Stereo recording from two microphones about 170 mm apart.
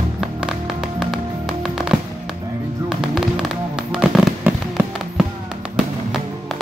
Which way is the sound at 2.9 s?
Centre (ahead or behind).